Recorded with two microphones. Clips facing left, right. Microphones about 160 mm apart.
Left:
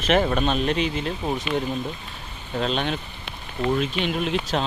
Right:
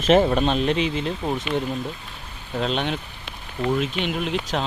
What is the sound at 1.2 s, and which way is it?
Speech, centre (ahead or behind).